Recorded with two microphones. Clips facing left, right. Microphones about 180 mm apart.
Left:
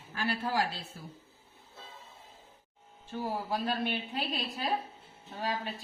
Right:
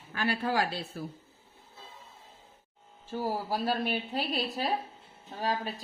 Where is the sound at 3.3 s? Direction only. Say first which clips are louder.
Right 2 dB; 35° right (ahead or behind).